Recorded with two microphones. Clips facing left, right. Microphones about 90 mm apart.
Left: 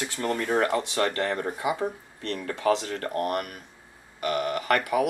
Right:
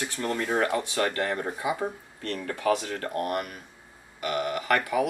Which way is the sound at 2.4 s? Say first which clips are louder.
Left 1 dB; 35° left (ahead or behind).